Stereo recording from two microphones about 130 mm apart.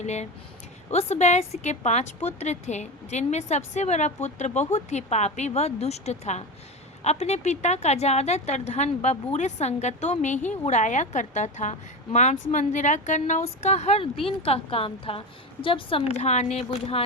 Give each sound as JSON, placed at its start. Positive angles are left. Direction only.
{"t": 0.0, "sound": "a woman's voice", "side_deg": 60}